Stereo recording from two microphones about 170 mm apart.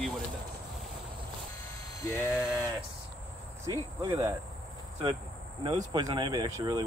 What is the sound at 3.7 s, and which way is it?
Speech, 20° right (ahead or behind).